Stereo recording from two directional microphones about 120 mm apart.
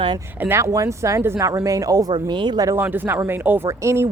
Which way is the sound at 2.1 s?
40° right (ahead or behind).